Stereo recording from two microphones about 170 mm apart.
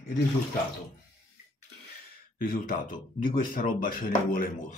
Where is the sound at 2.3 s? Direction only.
60° left (ahead or behind).